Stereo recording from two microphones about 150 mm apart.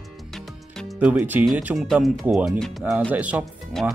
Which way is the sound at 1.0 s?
10° right (ahead or behind).